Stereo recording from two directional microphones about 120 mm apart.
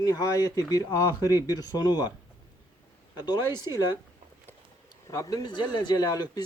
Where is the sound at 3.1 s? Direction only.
35° left (ahead or behind).